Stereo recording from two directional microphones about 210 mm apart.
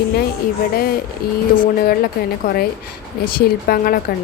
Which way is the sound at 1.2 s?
45° left (ahead or behind).